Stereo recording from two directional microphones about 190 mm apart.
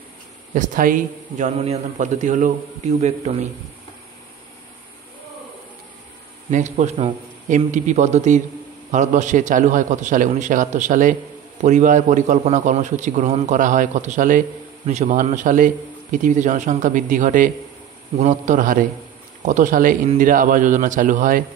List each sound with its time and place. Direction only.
0.6 s a man's voice: 45° right (ahead or behind)
1.6 s a man's voice: 35° right (ahead or behind)
6.5 s a man's voice: 40° right (ahead or behind)